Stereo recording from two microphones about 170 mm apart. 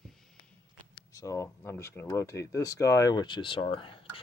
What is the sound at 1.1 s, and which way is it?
Speech, 15° left (ahead or behind).